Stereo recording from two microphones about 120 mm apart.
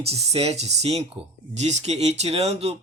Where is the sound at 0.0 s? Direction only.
60° right (ahead or behind).